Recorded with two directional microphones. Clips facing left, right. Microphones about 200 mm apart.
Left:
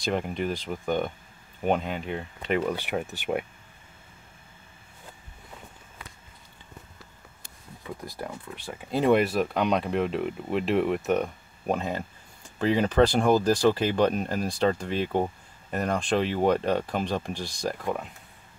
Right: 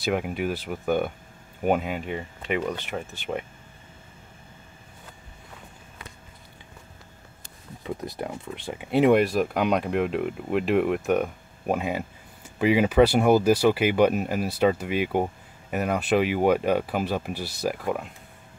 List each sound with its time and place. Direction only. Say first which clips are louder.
0.0 s speech: right 2 dB; 5° right (ahead or behind)
2.7 s speech: left 2 dB; 10° left (ahead or behind)
7.8 s speech: right 5 dB; 20° right (ahead or behind)
9.1 s speech: right 2 dB; centre (ahead or behind)